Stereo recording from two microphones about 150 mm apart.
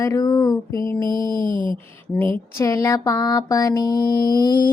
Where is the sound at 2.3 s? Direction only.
20° left (ahead or behind).